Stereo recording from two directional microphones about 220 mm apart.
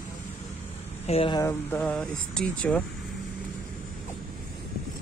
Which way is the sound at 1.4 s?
10° left (ahead or behind).